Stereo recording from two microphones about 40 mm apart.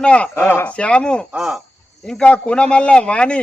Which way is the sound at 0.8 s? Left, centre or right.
Left.